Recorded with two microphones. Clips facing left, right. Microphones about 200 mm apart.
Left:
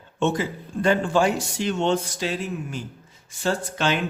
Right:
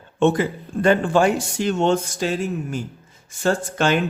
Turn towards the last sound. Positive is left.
turn(degrees=-50)  # may be behind; listen again after turning